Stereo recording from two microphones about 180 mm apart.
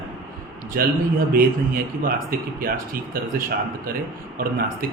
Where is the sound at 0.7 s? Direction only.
55° right (ahead or behind).